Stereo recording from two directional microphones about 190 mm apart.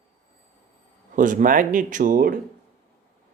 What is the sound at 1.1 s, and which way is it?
Speech, 45° right (ahead or behind).